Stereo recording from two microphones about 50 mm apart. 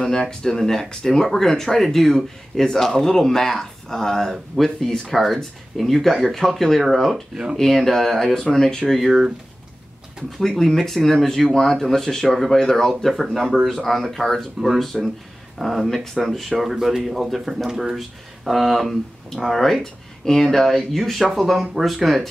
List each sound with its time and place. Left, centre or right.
0.0 s speech: centre
10.4 s speech: centre